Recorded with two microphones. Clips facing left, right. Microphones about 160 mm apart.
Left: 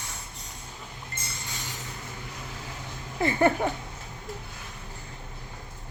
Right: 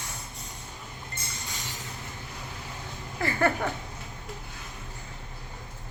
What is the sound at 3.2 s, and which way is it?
Speech, 20° left (ahead or behind).